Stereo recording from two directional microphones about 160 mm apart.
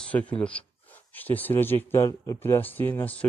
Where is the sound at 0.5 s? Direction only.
10° left (ahead or behind).